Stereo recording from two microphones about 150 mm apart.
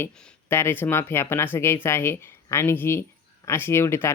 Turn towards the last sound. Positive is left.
turn(degrees=15)  # may be behind; listen again after turning